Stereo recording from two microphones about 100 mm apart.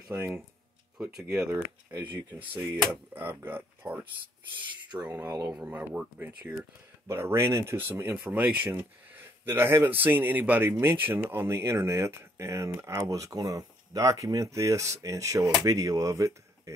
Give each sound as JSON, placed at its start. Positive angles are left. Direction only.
{"t": 0.1, "sound": "speech", "side_deg": -20}
{"t": 1.1, "sound": "speech", "side_deg": -10}
{"t": 1.5, "sound": "speech", "side_deg": -25}